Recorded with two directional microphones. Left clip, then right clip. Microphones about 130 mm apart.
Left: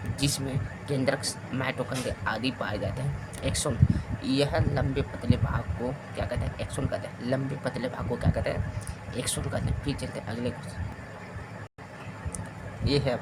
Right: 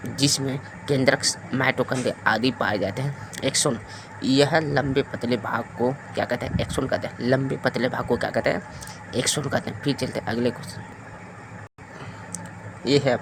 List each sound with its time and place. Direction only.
0.2 s speech: 50° right (ahead or behind)
12.8 s speech: 40° right (ahead or behind)